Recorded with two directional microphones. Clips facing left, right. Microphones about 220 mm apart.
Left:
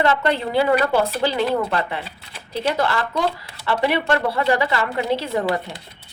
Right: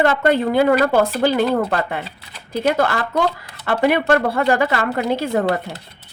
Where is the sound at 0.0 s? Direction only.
50° right (ahead or behind).